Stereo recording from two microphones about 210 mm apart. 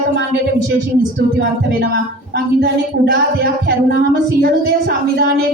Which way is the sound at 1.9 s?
50° right (ahead or behind).